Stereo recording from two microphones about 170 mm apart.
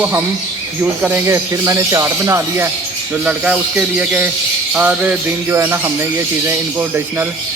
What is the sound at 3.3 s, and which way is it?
Speech, 5° right (ahead or behind).